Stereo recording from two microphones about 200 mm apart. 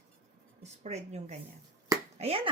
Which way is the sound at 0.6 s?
35° right (ahead or behind).